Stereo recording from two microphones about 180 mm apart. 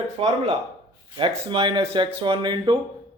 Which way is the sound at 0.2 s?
35° right (ahead or behind).